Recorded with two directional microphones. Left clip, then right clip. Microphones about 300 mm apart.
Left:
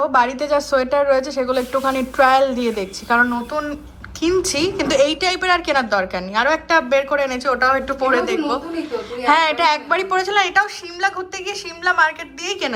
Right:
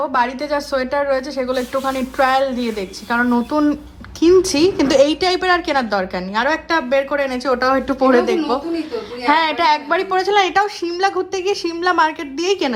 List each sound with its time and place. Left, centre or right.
0.0 s a woman's voice: centre